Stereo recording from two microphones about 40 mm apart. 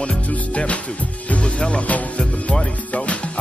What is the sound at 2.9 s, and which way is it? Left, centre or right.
Music, left.